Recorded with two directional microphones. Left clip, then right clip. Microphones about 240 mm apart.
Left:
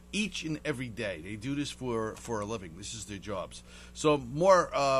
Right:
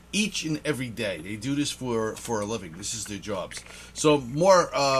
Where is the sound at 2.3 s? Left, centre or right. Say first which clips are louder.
Right 6 dB; centre.